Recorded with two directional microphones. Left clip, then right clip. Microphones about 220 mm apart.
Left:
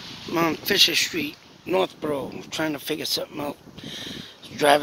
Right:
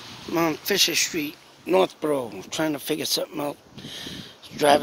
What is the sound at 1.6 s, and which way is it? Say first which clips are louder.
Speech: right 3 dB; 20° right (ahead or behind).